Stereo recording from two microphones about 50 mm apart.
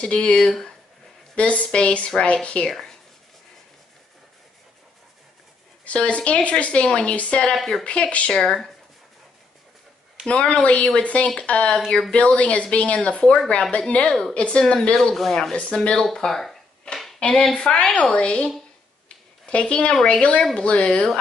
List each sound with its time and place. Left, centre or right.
0.0 s a woman's voice: left
0.5 s speech: centre
1.3 s a woman's voice: left
2.7 s speech: centre
5.9 s a woman's voice: left
7.5 s speech: centre
7.8 s a woman's voice: left
10.2 s a woman's voice: left
15.0 s speech: centre
15.5 s a woman's voice: left
16.0 s a sound: centre
17.2 s a woman's voice: centre
19.0 s a sound: left
20.1 s a woman's voice: left